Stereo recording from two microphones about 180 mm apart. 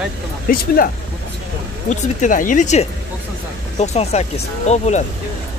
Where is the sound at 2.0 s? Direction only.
45° left (ahead or behind).